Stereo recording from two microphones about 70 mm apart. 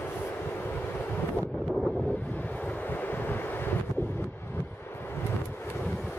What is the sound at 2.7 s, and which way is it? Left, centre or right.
Vehicle, left.